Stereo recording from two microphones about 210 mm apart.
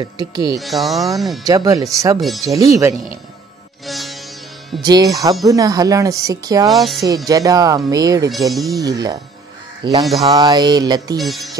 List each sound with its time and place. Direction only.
0.0 s music: 20° right (ahead or behind)
0.6 s speech: centre (ahead or behind)
1.5 s speech: 15° right (ahead or behind)
2.1 s speech: centre (ahead or behind)
2.4 s speech: 15° right (ahead or behind)
3.8 s sitar: centre (ahead or behind)
4.8 s speech: 20° right (ahead or behind)
6.7 s speech: centre (ahead or behind)
7.2 s speech: 15° right (ahead or behind)
9.8 s music: 20° right (ahead or behind)
11.1 s speech: centre (ahead or behind)